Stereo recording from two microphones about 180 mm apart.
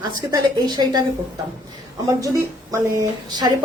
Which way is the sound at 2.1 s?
20° right (ahead or behind).